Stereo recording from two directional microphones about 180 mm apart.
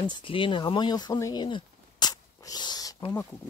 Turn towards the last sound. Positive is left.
turn(degrees=20)  # may be behind; listen again after turning